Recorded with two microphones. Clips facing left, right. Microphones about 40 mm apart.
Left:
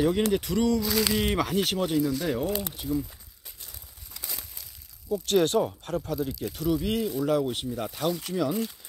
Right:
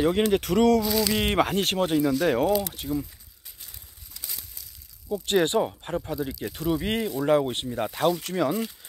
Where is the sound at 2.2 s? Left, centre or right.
Right.